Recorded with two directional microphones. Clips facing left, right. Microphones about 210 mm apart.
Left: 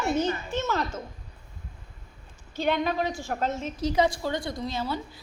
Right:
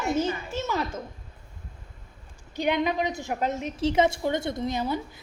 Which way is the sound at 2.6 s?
15° right (ahead or behind).